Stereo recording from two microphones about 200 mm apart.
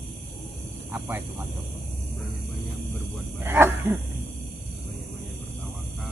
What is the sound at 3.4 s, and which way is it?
Speech, 10° right (ahead or behind).